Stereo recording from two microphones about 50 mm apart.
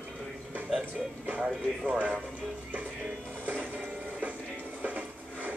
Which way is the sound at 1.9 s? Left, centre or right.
Right.